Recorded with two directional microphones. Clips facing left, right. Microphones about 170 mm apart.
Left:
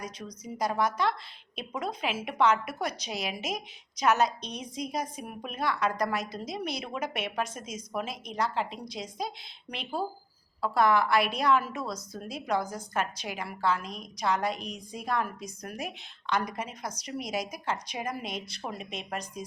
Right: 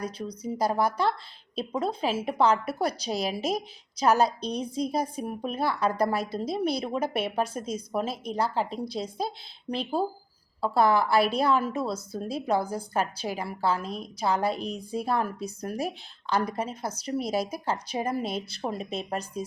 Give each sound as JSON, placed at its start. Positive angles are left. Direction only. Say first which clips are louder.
{"t": 0.0, "sound": "a woman's voice", "louder": "right 7 dB", "side_deg": -30}